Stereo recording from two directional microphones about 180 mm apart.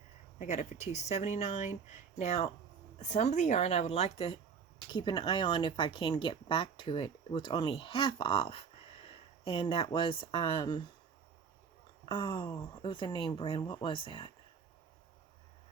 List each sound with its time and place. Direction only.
0.3 s speech: 40° left (ahead or behind)
4.9 s speech: 25° left (ahead or behind)
12.0 s speech: 30° left (ahead or behind)